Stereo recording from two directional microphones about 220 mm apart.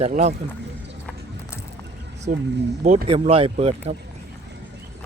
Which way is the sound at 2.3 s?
40° right (ahead or behind).